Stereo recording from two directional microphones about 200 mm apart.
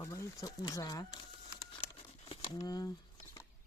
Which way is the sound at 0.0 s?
15° left (ahead or behind).